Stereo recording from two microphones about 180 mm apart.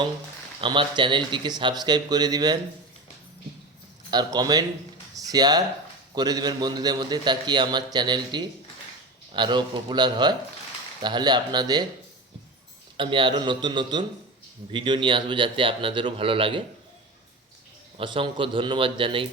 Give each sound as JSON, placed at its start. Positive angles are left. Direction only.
{"t": 0.6, "sound": "a man's voice", "side_deg": -25}
{"t": 4.1, "sound": "a man's voice", "side_deg": -25}
{"t": 13.0, "sound": "a man's voice", "side_deg": -25}
{"t": 17.9, "sound": "a man's voice", "side_deg": -30}